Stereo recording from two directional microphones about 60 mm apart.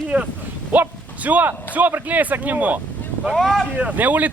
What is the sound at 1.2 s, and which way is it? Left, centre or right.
Speech, right.